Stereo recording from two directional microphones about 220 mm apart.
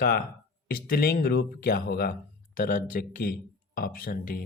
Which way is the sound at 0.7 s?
40° left (ahead or behind).